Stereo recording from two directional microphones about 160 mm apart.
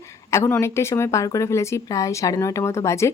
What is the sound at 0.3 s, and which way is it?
Speech, 15° left (ahead or behind).